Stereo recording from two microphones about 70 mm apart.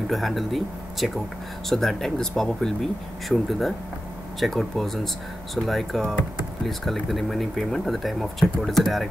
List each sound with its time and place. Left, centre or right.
0.1 s speech: centre